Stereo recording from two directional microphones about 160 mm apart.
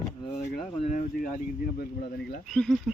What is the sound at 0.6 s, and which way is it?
Speech, 40° left (ahead or behind).